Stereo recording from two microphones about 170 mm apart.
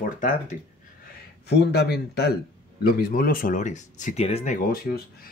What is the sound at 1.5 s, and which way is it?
Speech, 80° left.